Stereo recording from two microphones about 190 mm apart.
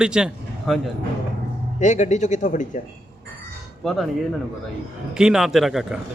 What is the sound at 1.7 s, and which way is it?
Speech, 40° left (ahead or behind).